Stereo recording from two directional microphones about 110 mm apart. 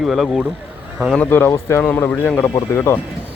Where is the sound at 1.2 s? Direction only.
20° left (ahead or behind).